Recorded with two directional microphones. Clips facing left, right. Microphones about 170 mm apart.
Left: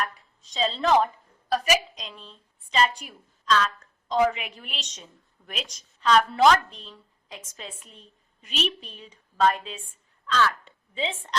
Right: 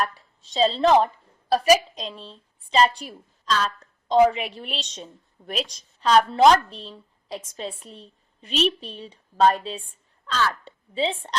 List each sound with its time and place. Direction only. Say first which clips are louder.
0.0 s a woman's voice: right 4 dB; 35° right (ahead or behind)